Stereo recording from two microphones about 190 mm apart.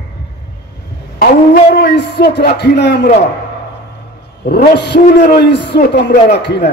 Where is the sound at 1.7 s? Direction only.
60° left (ahead or behind).